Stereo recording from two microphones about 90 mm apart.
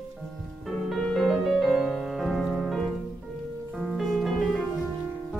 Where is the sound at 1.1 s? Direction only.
Centre (ahead or behind).